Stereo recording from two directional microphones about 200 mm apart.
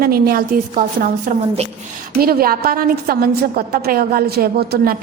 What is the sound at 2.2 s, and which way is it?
A woman's voice, 50° right (ahead or behind).